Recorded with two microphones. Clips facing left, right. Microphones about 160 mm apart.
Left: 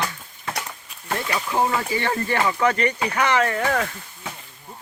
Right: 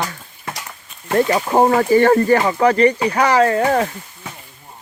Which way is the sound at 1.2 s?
50° right (ahead or behind).